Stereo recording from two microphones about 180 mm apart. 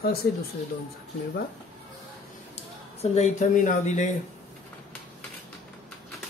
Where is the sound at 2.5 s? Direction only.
35° left (ahead or behind).